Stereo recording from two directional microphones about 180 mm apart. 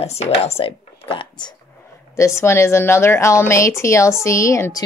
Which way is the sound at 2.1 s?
15° left (ahead or behind).